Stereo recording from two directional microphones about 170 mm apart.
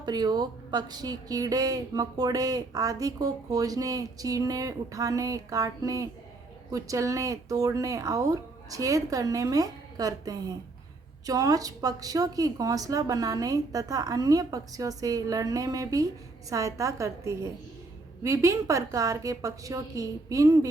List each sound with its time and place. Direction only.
0.0 s speech: 25° right (ahead or behind)